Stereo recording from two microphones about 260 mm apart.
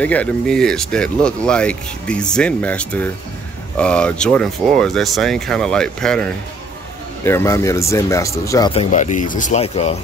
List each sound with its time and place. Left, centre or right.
0.0 s speech: centre
8.9 s speech: left